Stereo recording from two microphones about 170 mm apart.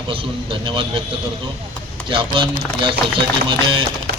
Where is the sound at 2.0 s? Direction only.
30° right (ahead or behind).